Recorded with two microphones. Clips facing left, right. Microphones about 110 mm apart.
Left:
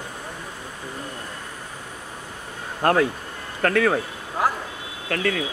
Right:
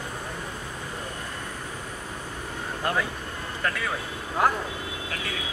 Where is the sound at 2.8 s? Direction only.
60° left (ahead or behind).